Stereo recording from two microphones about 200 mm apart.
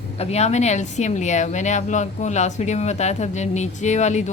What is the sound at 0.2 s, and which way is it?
Speech, 30° left (ahead or behind).